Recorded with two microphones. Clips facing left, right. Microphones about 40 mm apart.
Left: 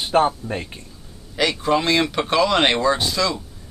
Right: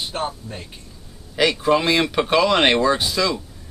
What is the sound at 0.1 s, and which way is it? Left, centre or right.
Speech, left.